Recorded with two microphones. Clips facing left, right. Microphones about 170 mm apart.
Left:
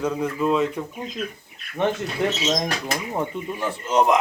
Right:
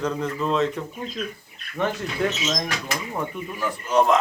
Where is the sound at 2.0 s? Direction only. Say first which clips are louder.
Left 2 dB; 30° left (ahead or behind).